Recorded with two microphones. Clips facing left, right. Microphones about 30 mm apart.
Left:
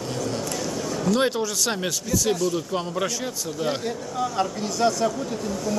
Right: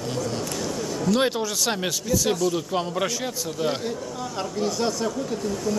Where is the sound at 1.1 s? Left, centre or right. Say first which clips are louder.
Even; centre.